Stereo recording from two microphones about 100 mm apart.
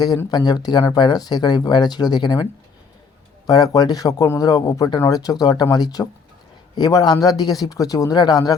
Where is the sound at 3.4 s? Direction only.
40° left (ahead or behind).